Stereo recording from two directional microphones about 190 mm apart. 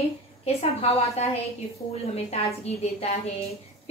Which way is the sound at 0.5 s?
30° left (ahead or behind).